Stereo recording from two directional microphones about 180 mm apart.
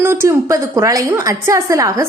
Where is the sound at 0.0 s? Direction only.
15° right (ahead or behind).